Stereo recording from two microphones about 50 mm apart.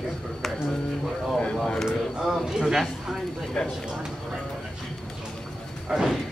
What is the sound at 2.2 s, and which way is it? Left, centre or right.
Speech, centre.